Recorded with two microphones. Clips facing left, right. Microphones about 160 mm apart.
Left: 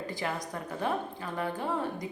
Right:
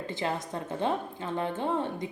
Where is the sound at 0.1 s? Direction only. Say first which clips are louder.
Right 5 dB; 25° right (ahead or behind).